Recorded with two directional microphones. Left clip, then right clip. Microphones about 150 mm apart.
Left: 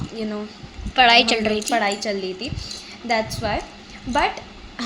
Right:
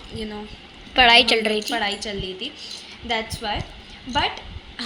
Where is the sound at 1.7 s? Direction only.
90° left.